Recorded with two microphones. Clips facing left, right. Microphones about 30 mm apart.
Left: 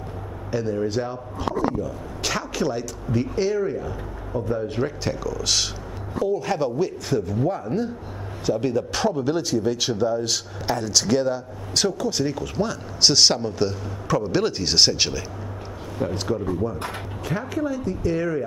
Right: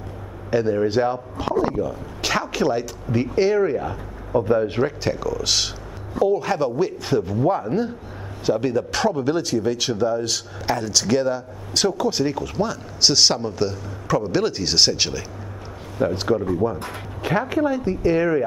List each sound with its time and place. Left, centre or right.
0.5 s a woman's voice: right
2.2 s a woman's voice: centre
4.8 s a man's voice: centre
7.1 s a man's voice: right; by 15.2 s centre
16.0 s a man's voice: centre
17.2 s a woman's voice: right